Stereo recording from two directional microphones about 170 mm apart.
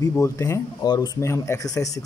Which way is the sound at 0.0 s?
20° left (ahead or behind).